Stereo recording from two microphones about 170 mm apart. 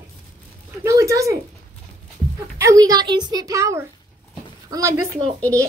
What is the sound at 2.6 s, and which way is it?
A woman's voice, 20° right (ahead or behind).